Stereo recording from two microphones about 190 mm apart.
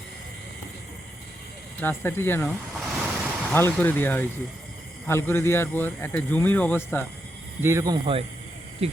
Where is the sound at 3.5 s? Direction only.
10° left (ahead or behind).